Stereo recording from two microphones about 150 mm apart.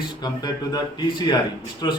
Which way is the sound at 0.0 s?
30° left (ahead or behind).